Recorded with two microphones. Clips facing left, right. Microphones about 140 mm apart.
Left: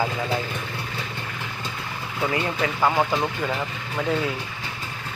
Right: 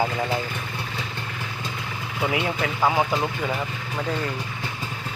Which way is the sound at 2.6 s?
5° right (ahead or behind).